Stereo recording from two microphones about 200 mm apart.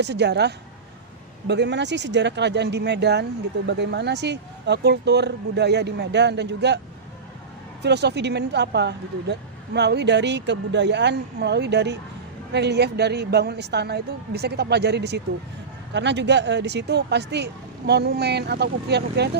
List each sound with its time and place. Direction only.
0.0 s speech: 60° right (ahead or behind)
7.8 s speech: 55° right (ahead or behind)